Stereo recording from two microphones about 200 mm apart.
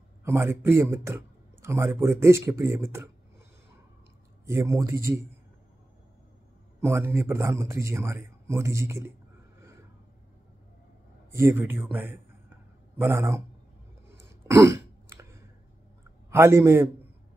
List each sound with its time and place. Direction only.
0.2 s a man's voice: 10° right (ahead or behind)
4.5 s a man's voice: 15° right (ahead or behind)
6.8 s a man's voice: 15° right (ahead or behind)
11.3 s a man's voice: 10° right (ahead or behind)
14.0 s throat clearing: 15° right (ahead or behind)
16.3 s a man's voice: 15° right (ahead or behind)